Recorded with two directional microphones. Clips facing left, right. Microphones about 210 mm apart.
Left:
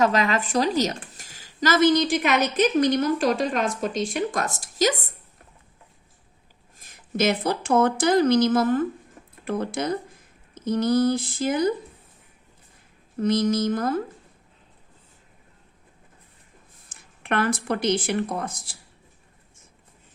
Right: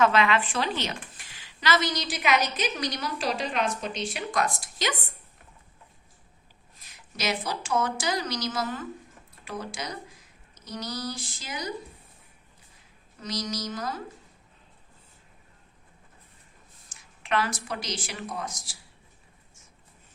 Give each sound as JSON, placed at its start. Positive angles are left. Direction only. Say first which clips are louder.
{"t": 0.0, "sound": "speech", "louder": "left 1 dB", "side_deg": 40}
{"t": 6.7, "sound": "speech", "louder": "left 13 dB", "side_deg": 50}
{"t": 13.1, "sound": "a woman's voice", "louder": "left 12 dB", "side_deg": 55}
{"t": 16.9, "sound": "speech", "louder": "left 2 dB", "side_deg": 55}